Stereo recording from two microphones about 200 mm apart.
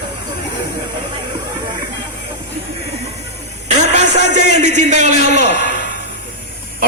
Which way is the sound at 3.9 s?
35° right (ahead or behind).